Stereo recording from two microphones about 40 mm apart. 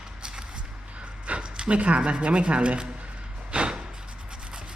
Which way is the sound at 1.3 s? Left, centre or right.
Right.